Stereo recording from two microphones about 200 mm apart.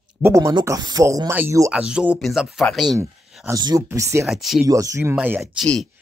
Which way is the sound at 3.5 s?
20° right (ahead or behind).